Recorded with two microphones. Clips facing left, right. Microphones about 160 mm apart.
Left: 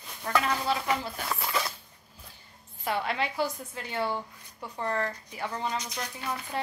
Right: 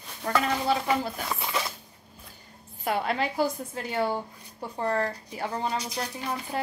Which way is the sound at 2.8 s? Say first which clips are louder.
Right 3 dB; 40° right (ahead or behind).